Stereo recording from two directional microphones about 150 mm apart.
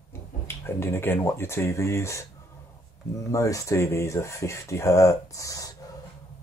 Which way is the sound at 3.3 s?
20° left (ahead or behind).